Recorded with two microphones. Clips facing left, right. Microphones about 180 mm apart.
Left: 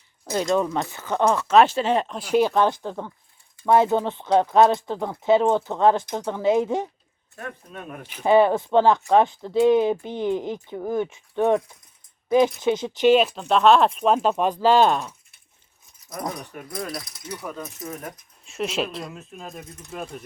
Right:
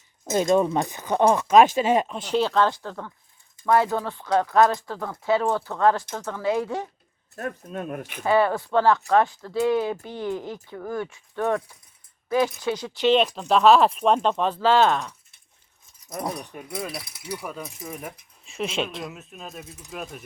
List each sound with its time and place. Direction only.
0.5 s speech: 15° right (ahead or behind)
2.1 s speech: 10° left (ahead or behind)
7.3 s speech: 40° right (ahead or behind)
8.3 s speech: 20° left (ahead or behind)
13.1 s speech: 5° left (ahead or behind)
16.0 s speech: 25° right (ahead or behind)
16.6 s speech: 10° right (ahead or behind)
18.4 s speech: centre (ahead or behind)